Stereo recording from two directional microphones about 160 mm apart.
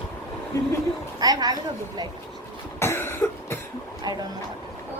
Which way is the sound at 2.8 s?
15° left (ahead or behind).